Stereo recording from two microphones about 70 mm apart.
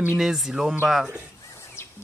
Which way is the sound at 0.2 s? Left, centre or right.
Centre.